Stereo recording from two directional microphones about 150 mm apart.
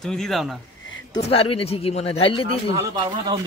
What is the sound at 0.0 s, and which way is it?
Speech, 5° left (ahead or behind).